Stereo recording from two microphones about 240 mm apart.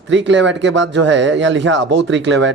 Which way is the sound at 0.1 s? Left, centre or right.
Right.